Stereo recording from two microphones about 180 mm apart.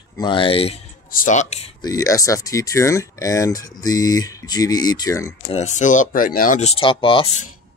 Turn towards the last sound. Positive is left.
turn(degrees=35)  # may be behind; listen again after turning